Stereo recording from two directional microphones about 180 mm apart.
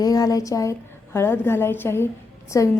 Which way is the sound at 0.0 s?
20° left (ahead or behind).